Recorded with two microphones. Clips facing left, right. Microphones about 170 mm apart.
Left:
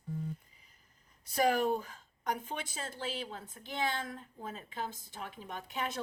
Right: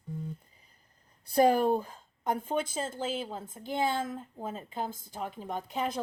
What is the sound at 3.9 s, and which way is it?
A woman's voice, 50° right (ahead or behind).